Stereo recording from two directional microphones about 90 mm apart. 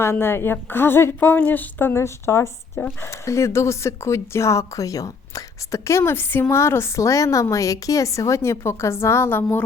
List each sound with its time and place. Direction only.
0.0 s speech: 25° left (ahead or behind)